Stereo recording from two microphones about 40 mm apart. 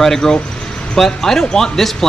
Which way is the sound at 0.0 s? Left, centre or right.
Centre.